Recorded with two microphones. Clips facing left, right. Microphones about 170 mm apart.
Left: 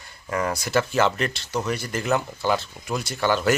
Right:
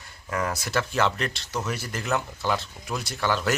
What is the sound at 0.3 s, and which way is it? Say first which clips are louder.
Speech: left 3 dB; centre (ahead or behind).